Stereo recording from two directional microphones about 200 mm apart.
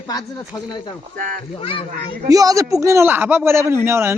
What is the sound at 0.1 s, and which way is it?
Speech, 20° left (ahead or behind).